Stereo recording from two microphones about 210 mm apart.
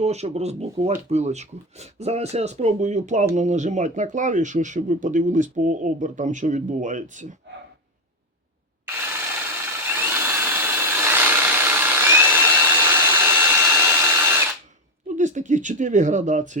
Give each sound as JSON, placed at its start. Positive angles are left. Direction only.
{"t": 0.0, "sound": "speech", "side_deg": -30}
{"t": 9.8, "sound": "tools", "side_deg": -10}
{"t": 15.0, "sound": "speech", "side_deg": -35}